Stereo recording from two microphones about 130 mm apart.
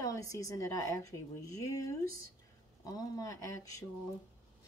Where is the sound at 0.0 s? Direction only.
25° left (ahead or behind).